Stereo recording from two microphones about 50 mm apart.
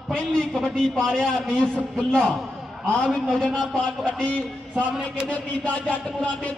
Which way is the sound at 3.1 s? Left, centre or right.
Centre.